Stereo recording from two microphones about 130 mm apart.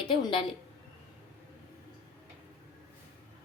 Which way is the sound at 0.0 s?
35° left (ahead or behind).